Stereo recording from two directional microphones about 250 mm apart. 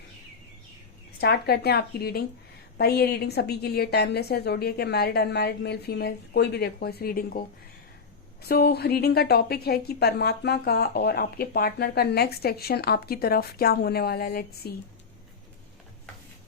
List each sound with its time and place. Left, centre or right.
1.2 s a woman's voice: left